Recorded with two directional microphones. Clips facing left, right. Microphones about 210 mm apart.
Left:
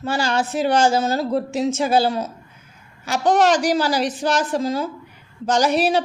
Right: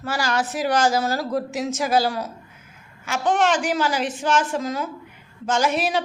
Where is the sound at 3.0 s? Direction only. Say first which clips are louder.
Left 4 dB; 35° left (ahead or behind).